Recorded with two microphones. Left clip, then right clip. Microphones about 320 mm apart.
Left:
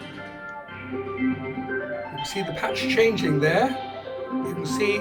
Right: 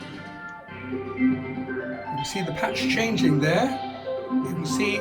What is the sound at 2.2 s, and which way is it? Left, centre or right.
Speech, centre.